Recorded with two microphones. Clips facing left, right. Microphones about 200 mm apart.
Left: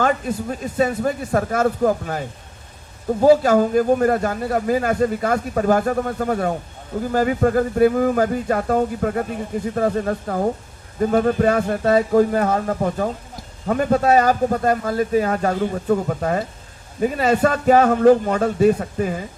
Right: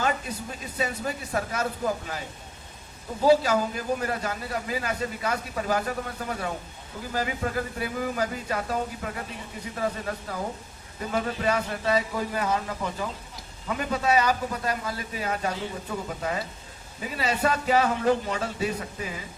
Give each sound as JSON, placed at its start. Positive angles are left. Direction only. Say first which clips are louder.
{"t": 0.0, "sound": "speech", "louder": "left 8 dB", "side_deg": 45}